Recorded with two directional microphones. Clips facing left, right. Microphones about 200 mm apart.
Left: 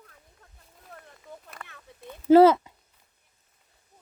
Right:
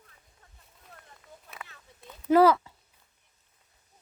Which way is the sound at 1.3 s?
60° left (ahead or behind).